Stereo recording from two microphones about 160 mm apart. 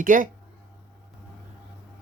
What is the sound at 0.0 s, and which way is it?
Speech, 55° right (ahead or behind).